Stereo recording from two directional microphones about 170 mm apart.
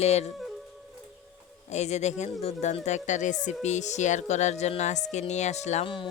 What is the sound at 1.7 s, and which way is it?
Speech, 40° left (ahead or behind).